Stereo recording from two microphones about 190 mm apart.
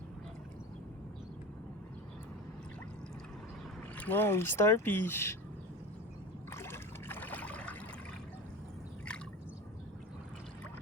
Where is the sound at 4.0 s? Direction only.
10° left (ahead or behind).